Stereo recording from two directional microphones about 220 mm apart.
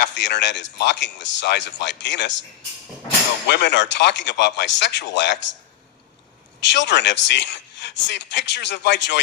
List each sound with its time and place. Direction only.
0.0 s a man's voice: 55° left (ahead or behind)
3.5 s a man's voice: 50° left (ahead or behind)
6.6 s a man's voice: 55° left (ahead or behind)